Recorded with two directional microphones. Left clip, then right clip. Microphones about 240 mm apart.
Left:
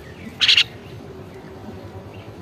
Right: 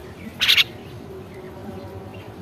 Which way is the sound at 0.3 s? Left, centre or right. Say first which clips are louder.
Left 2 dB; centre.